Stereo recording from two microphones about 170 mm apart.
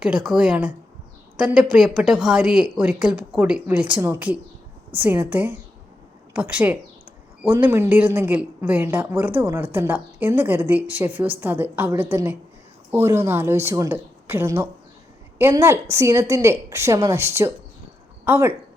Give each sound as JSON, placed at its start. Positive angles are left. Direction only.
{"t": 0.0, "sound": "a woman's voice", "side_deg": -5}